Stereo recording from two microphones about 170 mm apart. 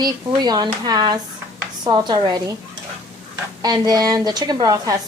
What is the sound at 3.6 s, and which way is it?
Speech, 25° right (ahead or behind).